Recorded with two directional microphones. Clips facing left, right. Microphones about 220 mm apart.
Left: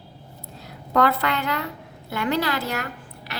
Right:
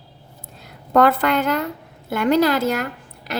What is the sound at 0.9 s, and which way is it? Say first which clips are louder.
A woman's voice: right 5 dB; 50° right (ahead or behind).